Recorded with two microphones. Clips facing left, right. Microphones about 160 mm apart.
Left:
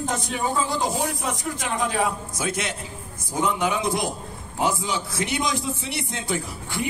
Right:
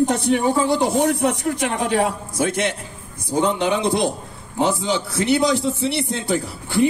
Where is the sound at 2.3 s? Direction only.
60° right (ahead or behind).